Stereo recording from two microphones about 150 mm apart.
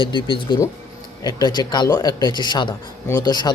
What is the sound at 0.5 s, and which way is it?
Speech, 30° left (ahead or behind).